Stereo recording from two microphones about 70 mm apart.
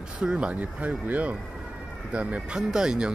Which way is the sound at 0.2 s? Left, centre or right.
Centre.